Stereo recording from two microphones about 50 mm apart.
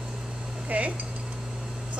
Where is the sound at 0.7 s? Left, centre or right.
Right.